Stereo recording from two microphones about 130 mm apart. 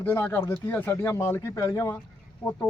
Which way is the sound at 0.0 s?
15° left (ahead or behind).